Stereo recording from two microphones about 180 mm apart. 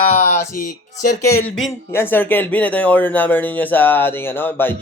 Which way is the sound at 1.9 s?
10° left (ahead or behind).